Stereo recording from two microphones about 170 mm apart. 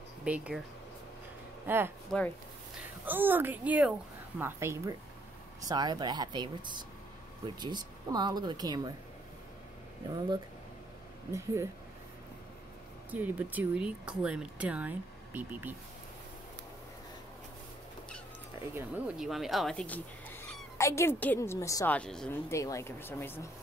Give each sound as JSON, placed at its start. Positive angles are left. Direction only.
{"t": 0.2, "sound": "speech", "side_deg": -5}
{"t": 2.1, "sound": "speech", "side_deg": 5}
{"t": 3.1, "sound": "speech", "side_deg": -10}
{"t": 11.3, "sound": "speech", "side_deg": -15}
{"t": 13.1, "sound": "speech", "side_deg": -10}
{"t": 18.8, "sound": "speech", "side_deg": -10}
{"t": 21.9, "sound": "speech", "side_deg": 5}
{"t": 22.5, "sound": "speech", "side_deg": 20}